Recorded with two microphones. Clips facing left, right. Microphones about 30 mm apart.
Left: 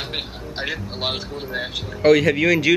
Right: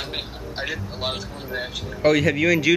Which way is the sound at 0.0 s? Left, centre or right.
Centre.